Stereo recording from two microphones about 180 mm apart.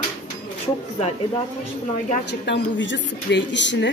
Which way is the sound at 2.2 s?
70° left (ahead or behind).